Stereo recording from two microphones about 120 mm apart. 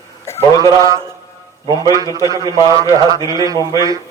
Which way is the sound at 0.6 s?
25° right (ahead or behind).